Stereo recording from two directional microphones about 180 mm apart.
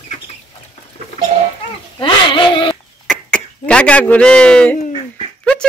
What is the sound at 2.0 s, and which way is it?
Cat, 25° left (ahead or behind).